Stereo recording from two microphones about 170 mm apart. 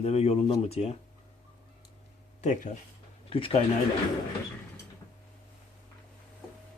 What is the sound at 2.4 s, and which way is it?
Speech, 40° left (ahead or behind).